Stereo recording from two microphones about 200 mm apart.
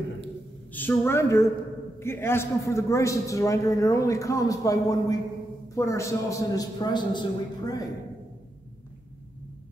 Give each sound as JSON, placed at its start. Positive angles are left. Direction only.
{"t": 0.7, "sound": "a man's voice", "side_deg": 10}